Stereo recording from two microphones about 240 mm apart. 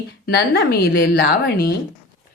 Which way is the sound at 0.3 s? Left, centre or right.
Left.